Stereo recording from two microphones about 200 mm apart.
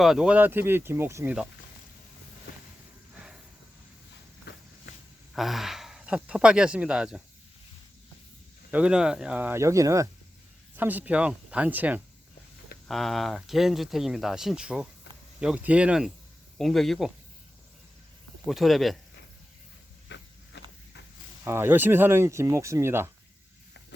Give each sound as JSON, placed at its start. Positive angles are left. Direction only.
{"t": 0.0, "sound": "speech", "side_deg": 0}
{"t": 2.5, "sound": "vehicle", "side_deg": 45}
{"t": 4.5, "sound": "walk", "side_deg": 55}
{"t": 5.3, "sound": "speech", "side_deg": 0}
{"t": 8.7, "sound": "speech", "side_deg": -5}
{"t": 18.4, "sound": "speech", "side_deg": 0}
{"t": 20.1, "sound": "vehicle", "side_deg": 60}
{"t": 21.4, "sound": "speech", "side_deg": -10}